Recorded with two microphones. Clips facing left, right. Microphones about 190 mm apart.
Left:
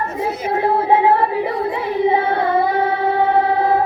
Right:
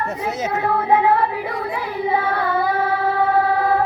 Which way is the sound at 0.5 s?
30° left (ahead or behind).